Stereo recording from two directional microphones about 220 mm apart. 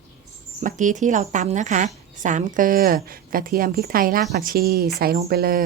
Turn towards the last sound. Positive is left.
turn(degrees=-45)  # may be behind; listen again after turning